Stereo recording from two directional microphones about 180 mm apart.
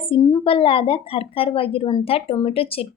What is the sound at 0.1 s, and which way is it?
A woman's voice, 25° left (ahead or behind).